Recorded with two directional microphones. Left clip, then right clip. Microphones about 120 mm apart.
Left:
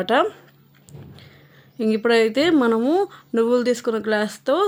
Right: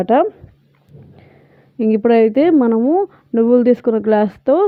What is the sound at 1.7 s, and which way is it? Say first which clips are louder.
Speech: right 5 dB; 45° right (ahead or behind).